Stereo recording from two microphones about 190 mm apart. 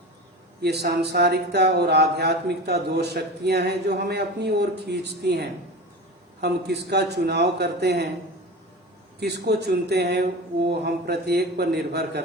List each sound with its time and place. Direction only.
0.6 s speech: 60° right (ahead or behind)
9.2 s speech: 60° right (ahead or behind)